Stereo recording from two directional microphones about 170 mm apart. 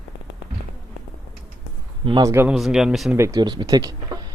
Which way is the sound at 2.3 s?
10° right (ahead or behind).